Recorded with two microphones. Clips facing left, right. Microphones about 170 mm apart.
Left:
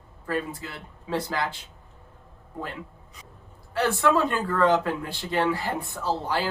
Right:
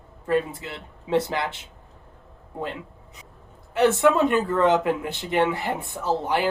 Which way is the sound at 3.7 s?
20° right (ahead or behind).